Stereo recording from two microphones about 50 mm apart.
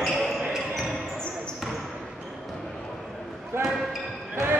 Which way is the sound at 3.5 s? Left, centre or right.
Right.